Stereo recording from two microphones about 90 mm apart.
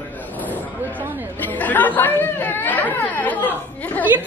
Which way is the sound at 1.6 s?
20° left (ahead or behind).